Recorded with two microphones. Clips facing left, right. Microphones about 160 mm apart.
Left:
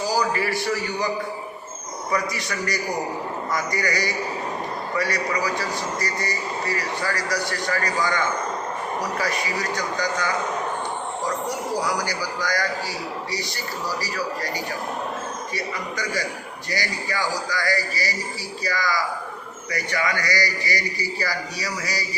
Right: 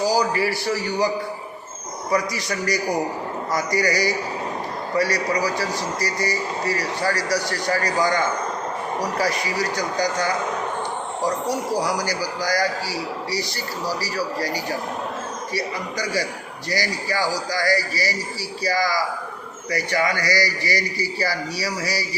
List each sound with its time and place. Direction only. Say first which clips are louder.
0.2 s a man's voice: right 2 dB; 35° right (ahead or behind)
2.1 s a man's voice: right 3 dB; 35° right (ahead or behind)
11.8 s a man's voice: right 2 dB; 35° right (ahead or behind)
15.5 s a man's voice: right 4 dB; 35° right (ahead or behind)